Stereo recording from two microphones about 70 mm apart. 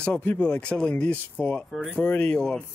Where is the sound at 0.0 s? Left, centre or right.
Left.